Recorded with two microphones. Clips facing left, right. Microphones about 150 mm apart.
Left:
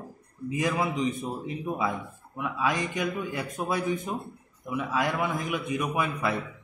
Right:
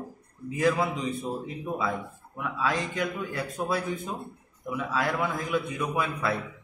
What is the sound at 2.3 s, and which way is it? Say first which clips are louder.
A man's voice: left 1 dB; 20° left (ahead or behind).